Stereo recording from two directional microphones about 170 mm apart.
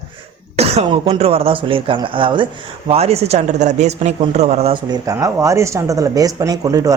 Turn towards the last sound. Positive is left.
turn(degrees=-20)  # may be behind; listen again after turning